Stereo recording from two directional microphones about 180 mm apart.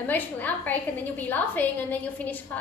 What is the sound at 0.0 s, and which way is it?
A woman's voice, 10° left (ahead or behind).